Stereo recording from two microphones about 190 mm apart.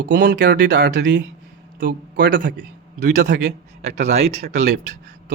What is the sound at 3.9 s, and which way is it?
Speech, 35° right (ahead or behind).